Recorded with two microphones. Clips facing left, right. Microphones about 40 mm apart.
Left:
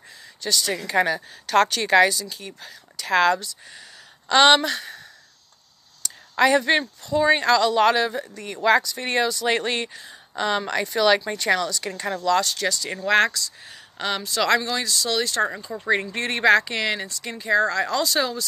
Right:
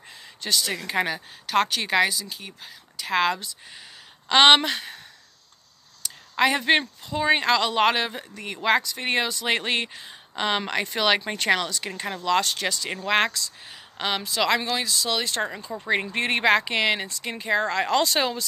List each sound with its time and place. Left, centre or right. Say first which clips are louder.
0.4 s speech: left 2 dB; right
0.8 s speech: left 4 dB; centre
6.3 s speech: left 2 dB; centre